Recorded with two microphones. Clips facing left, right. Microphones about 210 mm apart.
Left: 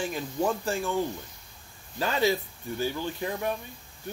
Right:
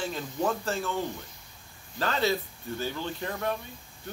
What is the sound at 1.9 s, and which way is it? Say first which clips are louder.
Speech: left 2 dB; 10° left (ahead or behind).